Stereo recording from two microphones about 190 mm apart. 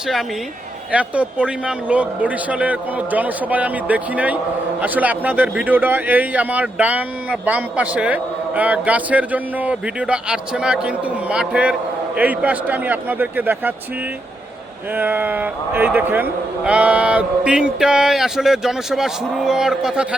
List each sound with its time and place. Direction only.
0.9 s a man's voice: 5° right (ahead or behind)
14.9 s a man's voice: 10° right (ahead or behind)